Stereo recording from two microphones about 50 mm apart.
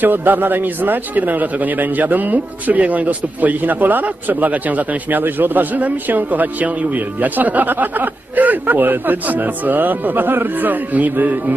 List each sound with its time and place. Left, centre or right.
0.0 s a man's voice: right